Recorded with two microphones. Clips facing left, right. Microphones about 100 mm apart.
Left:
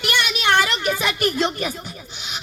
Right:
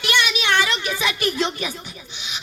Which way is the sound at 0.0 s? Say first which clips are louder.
Even; 40° left (ahead or behind).